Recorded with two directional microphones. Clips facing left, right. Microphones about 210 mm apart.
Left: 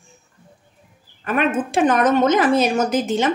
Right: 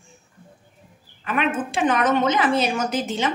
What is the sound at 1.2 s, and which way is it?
A woman's voice, 45° left (ahead or behind).